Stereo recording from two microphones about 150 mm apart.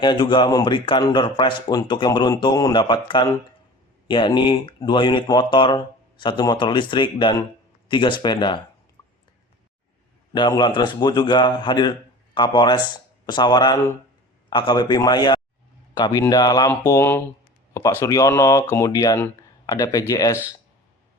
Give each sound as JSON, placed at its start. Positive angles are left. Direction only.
{"t": 0.0, "sound": "speech", "side_deg": 30}
{"t": 10.3, "sound": "speech", "side_deg": 30}